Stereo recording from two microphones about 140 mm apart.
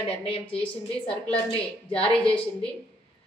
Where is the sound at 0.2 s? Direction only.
40° left (ahead or behind).